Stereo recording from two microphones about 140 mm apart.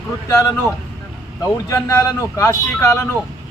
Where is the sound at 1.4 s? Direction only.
20° left (ahead or behind).